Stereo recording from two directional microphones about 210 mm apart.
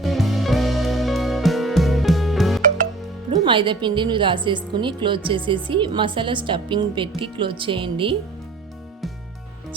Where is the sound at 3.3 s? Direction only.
25° right (ahead or behind).